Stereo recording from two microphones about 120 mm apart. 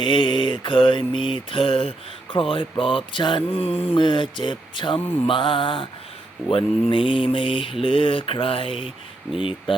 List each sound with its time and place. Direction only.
0.0 s mantra: 40° left (ahead or behind)